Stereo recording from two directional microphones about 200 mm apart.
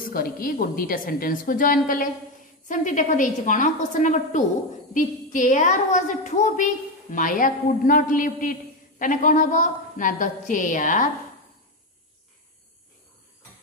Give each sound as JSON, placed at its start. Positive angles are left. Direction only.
{"t": 0.0, "sound": "a woman's voice", "side_deg": 45}